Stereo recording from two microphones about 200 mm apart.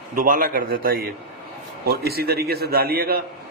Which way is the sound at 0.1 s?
45° right (ahead or behind).